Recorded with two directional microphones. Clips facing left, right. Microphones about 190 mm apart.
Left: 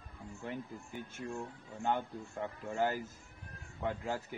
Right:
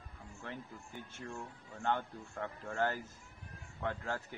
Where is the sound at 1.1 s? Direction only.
10° left (ahead or behind).